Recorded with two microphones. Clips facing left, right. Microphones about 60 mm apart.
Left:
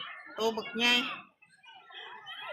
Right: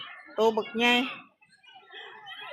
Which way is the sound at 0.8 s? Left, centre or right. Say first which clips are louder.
Right 4 dB; centre.